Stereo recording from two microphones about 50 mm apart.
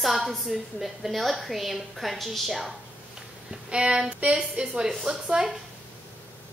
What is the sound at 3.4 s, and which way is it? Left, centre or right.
Speech, centre.